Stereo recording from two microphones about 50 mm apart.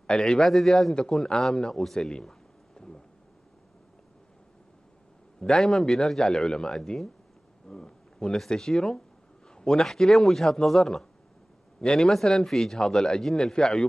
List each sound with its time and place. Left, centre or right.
0.0 s a man's voice: centre
0.5 s a man's voice: centre
5.4 s a man's voice: centre
7.6 s a sound: centre
8.4 s a man's voice: centre